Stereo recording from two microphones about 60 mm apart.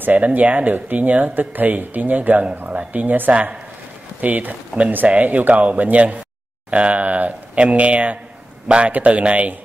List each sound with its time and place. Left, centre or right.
0.0 s speech: right